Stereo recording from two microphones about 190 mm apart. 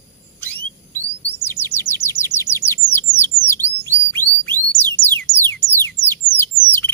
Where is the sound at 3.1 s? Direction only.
10° left (ahead or behind).